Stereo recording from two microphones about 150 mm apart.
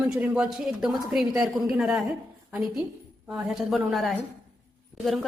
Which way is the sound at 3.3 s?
5° right (ahead or behind).